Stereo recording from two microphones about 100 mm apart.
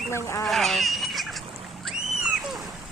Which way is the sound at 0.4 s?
Centre (ahead or behind).